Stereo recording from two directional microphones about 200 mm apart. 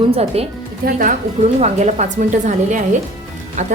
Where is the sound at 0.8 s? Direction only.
40° right (ahead or behind).